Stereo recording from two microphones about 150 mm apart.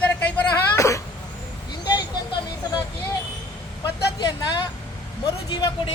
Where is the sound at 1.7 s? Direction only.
30° left (ahead or behind).